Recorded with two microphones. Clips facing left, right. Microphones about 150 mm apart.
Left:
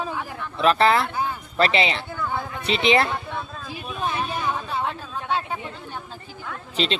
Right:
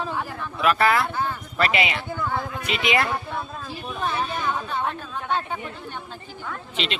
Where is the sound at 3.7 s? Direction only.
10° left (ahead or behind).